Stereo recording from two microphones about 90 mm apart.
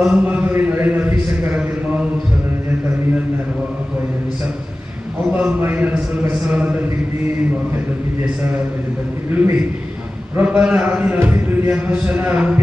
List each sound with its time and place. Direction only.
0.0 s a man's voice: 10° right (ahead or behind)
0.5 s a sound: 20° right (ahead or behind)
5.3 s a man's voice: 20° right (ahead or behind)
9.4 s a man's voice: 20° right (ahead or behind)